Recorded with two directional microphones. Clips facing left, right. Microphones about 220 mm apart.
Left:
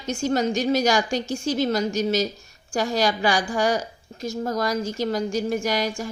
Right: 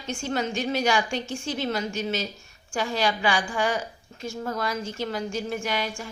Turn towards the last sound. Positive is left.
turn(degrees=40)  # may be behind; listen again after turning